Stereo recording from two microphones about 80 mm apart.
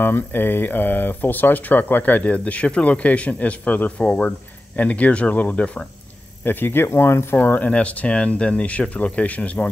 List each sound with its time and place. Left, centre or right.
0.0 s speech: left